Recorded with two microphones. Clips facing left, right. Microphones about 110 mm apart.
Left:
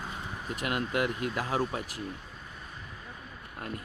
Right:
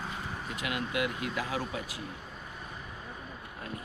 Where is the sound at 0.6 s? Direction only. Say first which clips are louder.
Left 3 dB; 45° left (ahead or behind).